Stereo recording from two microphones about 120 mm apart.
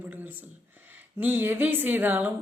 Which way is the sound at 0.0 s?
15° right (ahead or behind).